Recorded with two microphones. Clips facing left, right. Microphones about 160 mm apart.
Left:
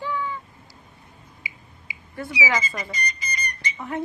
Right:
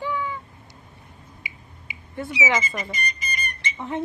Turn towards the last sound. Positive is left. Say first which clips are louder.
# right 1 dB
turn(degrees=-25)  # may be behind; listen again after turning